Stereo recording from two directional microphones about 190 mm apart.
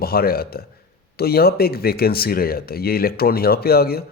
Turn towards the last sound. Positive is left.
turn(degrees=55)  # may be behind; listen again after turning